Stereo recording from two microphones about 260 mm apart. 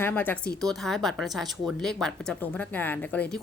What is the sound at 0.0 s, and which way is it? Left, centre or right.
Speech, centre.